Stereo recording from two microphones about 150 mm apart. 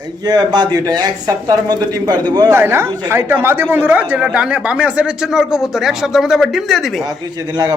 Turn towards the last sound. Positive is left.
turn(degrees=-25)  # may be behind; listen again after turning